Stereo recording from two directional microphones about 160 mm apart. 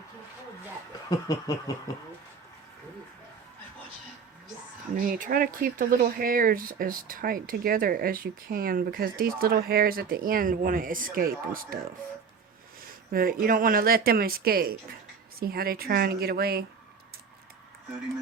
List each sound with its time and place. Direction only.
1.3 s snicker: 20° left (ahead or behind)
4.9 s speech: 55° right (ahead or behind)
13.1 s speech: 65° right (ahead or behind)